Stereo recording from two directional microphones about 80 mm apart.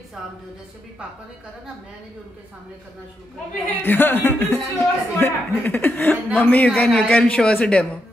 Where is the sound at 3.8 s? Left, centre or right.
Left.